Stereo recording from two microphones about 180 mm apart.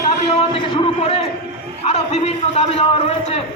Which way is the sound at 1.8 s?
35° left (ahead or behind).